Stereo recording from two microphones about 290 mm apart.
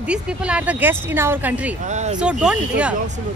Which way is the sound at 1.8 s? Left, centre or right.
Right.